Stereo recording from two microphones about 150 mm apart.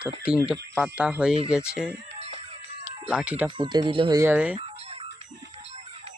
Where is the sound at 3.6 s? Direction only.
30° right (ahead or behind).